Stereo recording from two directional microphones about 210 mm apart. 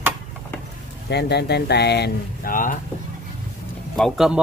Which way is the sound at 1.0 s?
50° left (ahead or behind).